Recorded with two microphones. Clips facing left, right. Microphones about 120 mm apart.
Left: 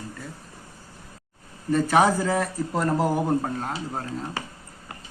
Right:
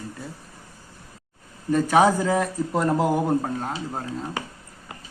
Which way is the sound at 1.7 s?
Centre (ahead or behind).